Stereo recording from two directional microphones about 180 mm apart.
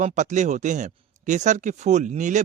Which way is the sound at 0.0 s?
40° right (ahead or behind).